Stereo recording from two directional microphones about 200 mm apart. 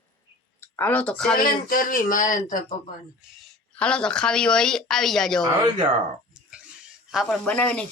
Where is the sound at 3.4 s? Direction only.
5° left (ahead or behind).